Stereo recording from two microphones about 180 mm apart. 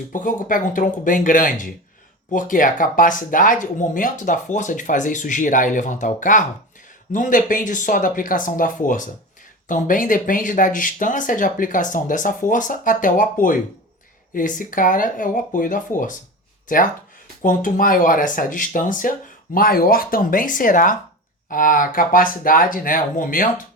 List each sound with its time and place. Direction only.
0.1 s speech: 50° left (ahead or behind)